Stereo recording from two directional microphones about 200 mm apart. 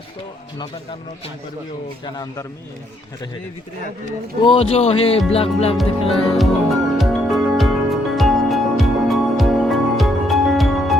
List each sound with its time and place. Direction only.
2.1 s speech: 15° left (ahead or behind)
4.4 s speech: 30° left (ahead or behind)
5.7 s music: centre (ahead or behind)